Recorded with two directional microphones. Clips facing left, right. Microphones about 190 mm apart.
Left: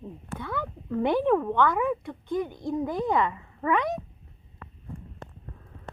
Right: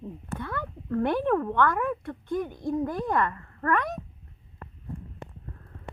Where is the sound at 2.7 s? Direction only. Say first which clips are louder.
Left 2 dB; 5° left (ahead or behind).